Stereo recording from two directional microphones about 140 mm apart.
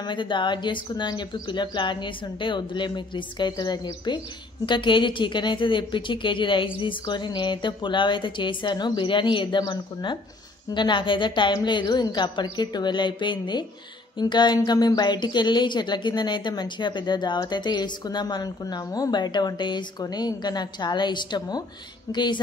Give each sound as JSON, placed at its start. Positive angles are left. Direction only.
{"t": 0.0, "sound": "a woman's voice", "side_deg": 35}